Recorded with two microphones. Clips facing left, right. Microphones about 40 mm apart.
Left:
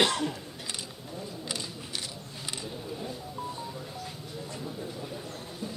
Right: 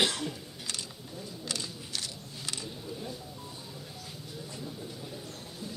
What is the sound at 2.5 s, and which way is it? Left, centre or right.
Vehicle, centre.